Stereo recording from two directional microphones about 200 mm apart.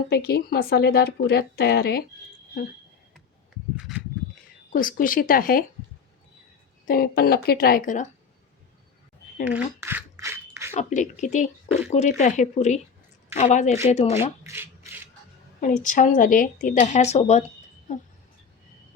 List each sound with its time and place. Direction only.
0.1 s speech: 50° left (ahead or behind)
3.8 s a sound: 5° right (ahead or behind)
4.7 s speech: 45° left (ahead or behind)
6.8 s speech: 50° left (ahead or behind)
9.5 s scissors: 10° right (ahead or behind)
10.7 s speech: 35° left (ahead or behind)
14.4 s rub: 10° right (ahead or behind)
15.6 s speech: 40° left (ahead or behind)